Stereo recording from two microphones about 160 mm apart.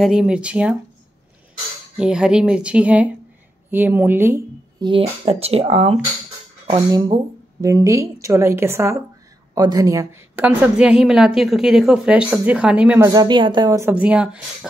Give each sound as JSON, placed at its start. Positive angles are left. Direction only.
{"t": 0.0, "sound": "a woman's voice", "side_deg": -5}
{"t": 2.0, "sound": "a woman's voice", "side_deg": -5}
{"t": 4.8, "sound": "speech", "side_deg": -35}
{"t": 7.6, "sound": "a woman's voice", "side_deg": -20}
{"t": 10.4, "sound": "a woman's voice", "side_deg": -5}
{"t": 13.1, "sound": "a woman's voice", "side_deg": -25}
{"t": 13.7, "sound": "a woman's voice", "side_deg": -10}